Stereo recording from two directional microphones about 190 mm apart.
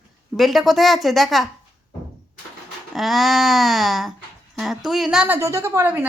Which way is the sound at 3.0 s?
Centre (ahead or behind).